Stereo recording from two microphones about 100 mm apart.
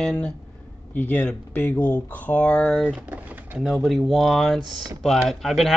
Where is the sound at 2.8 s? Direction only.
15° right (ahead or behind).